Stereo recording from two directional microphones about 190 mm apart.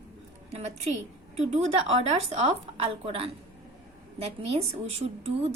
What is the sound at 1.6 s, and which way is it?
A woman's voice, 35° right (ahead or behind).